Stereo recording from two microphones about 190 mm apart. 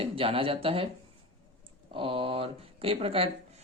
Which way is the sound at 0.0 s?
30° right (ahead or behind).